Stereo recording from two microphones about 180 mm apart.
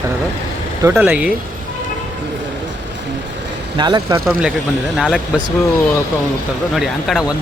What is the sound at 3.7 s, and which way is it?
Speech, 25° right (ahead or behind).